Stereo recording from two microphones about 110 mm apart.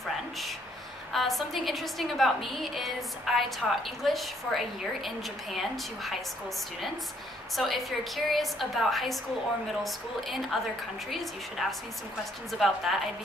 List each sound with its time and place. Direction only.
0.0 s a sound: centre (ahead or behind)
1.1 s a woman's voice: centre (ahead or behind)
7.5 s a woman's voice: centre (ahead or behind)